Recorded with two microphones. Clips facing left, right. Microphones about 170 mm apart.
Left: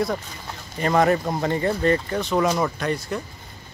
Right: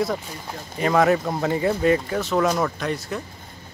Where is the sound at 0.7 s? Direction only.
5° right (ahead or behind).